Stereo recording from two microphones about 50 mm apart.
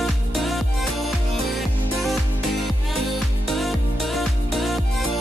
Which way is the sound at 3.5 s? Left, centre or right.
Centre.